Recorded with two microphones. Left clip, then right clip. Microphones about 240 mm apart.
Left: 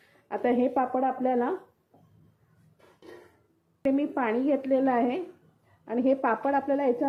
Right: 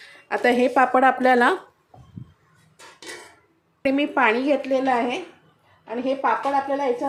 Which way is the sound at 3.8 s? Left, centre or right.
Centre.